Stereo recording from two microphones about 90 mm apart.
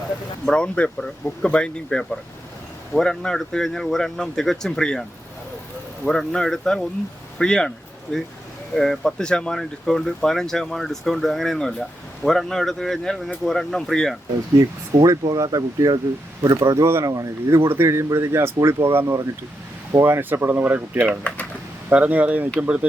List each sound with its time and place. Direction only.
0.4 s speech: 10° left (ahead or behind)
6.1 s speech: 5° left (ahead or behind)
8.7 s speech: 5° left (ahead or behind)
14.9 s speech: 40° right (ahead or behind); by 21.1 s 20° right (ahead or behind)
21.1 s speech: 15° left (ahead or behind)
21.8 s speech: 15° right (ahead or behind)